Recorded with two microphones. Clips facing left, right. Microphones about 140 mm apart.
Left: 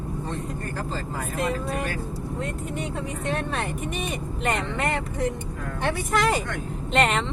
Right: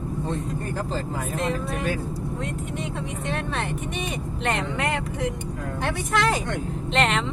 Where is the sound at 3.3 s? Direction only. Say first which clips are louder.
Left 1 dB; centre (ahead or behind).